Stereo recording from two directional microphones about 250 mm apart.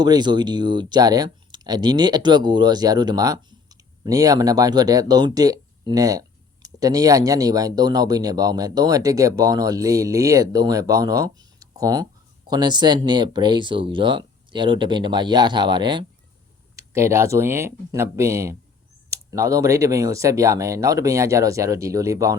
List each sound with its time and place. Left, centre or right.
0.0 s speech: centre